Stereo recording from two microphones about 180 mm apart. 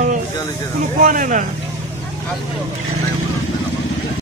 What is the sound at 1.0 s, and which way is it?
Speech, 45° right (ahead or behind).